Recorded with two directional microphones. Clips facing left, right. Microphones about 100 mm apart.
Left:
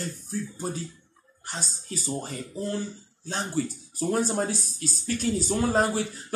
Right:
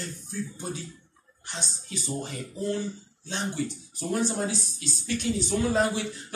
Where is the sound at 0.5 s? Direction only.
40° left (ahead or behind).